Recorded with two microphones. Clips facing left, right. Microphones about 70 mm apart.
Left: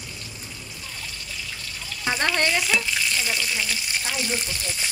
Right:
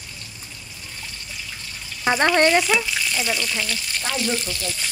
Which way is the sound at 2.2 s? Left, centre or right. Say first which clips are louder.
Right 7 dB; right.